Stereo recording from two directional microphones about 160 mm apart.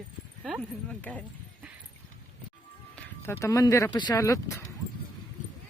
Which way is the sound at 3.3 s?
15° left (ahead or behind).